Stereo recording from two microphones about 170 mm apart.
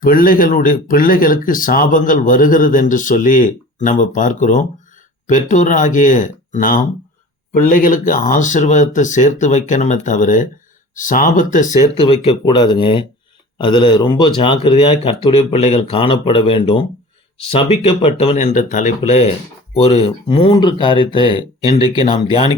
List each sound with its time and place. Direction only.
0.0 s speech: 55° left (ahead or behind); by 20.1 s 35° left (ahead or behind)
20.2 s speech: 25° left (ahead or behind)